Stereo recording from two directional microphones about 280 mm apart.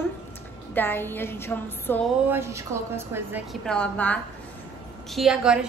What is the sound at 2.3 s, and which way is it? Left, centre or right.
A woman's voice, centre.